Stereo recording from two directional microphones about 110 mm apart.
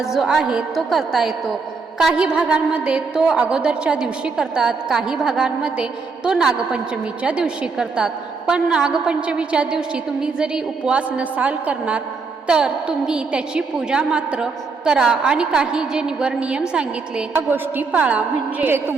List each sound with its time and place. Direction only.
0.0 s a woman's voice: 5° right (ahead or behind)